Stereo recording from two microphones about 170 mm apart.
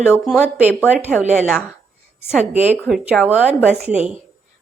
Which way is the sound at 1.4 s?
5° right (ahead or behind).